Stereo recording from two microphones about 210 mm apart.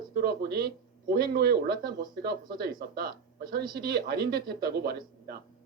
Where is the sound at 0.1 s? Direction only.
50° right (ahead or behind).